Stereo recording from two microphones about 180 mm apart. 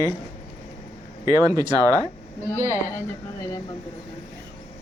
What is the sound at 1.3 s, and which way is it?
Speech, 20° right (ahead or behind).